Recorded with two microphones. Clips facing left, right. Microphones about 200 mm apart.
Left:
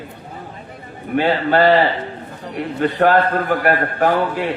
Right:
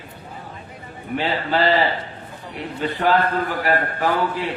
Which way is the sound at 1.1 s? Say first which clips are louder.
Left 6 dB; 55° left (ahead or behind).